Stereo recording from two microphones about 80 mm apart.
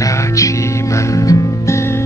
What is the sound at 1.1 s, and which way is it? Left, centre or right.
Music, left.